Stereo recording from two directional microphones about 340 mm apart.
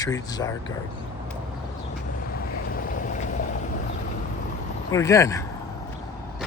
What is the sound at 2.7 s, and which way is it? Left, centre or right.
Boat, left.